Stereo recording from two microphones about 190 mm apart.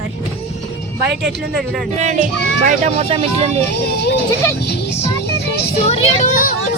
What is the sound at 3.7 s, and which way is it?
Speech, 60° left (ahead or behind).